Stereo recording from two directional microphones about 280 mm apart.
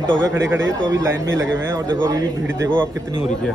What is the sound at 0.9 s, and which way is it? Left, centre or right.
Speech, right.